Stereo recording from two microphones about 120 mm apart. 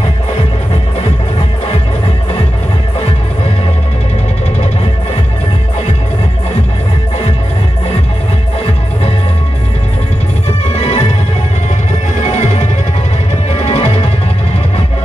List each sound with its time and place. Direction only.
10.7 s music: 65° left (ahead or behind)
12.2 s music: 75° left (ahead or behind)
13.7 s music: 60° left (ahead or behind)